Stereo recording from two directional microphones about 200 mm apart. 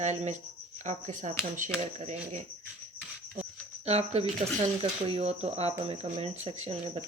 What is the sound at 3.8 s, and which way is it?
Speech, 30° right (ahead or behind).